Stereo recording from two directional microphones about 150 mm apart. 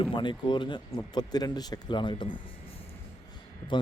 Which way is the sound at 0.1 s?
30° left (ahead or behind).